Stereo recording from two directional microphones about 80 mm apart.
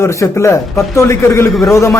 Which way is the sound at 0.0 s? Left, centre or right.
Left.